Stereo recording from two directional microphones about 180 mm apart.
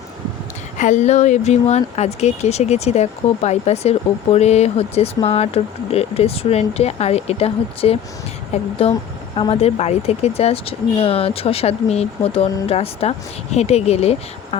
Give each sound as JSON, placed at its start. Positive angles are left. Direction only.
{"t": 0.8, "sound": "speech", "side_deg": 45}